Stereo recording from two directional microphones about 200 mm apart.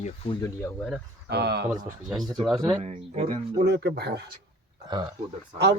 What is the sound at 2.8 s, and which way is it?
Speech, 35° right (ahead or behind).